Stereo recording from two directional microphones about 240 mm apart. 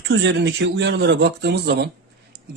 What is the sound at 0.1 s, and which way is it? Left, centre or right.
Speech, right.